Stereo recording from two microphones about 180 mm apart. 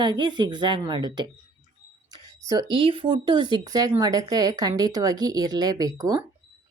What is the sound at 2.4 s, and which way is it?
Speech, 20° right (ahead or behind).